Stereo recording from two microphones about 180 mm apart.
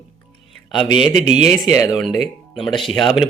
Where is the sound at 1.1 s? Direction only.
40° right (ahead or behind).